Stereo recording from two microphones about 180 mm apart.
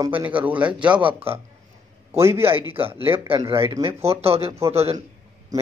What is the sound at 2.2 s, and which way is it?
A man's voice, 15° right (ahead or behind).